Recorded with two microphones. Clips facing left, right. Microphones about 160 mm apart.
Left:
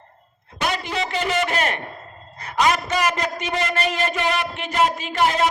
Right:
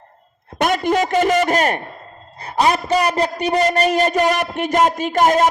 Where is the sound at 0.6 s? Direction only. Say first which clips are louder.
Right 8 dB; 50° right (ahead or behind).